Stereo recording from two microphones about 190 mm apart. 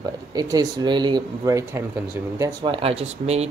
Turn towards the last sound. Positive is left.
turn(degrees=-35)  # may be behind; listen again after turning